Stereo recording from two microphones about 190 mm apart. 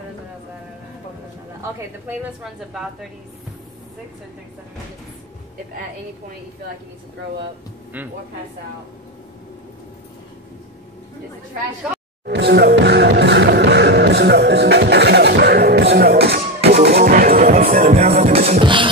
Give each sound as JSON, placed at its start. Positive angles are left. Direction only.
{"t": 1.6, "sound": "speech", "side_deg": -15}
{"t": 2.4, "sound": "a woman's voice", "side_deg": 0}
{"t": 12.3, "sound": "music", "side_deg": -60}
{"t": 17.9, "sound": "music", "side_deg": -35}